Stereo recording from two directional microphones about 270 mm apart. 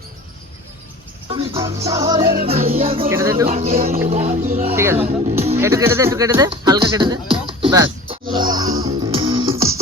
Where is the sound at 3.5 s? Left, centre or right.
Right.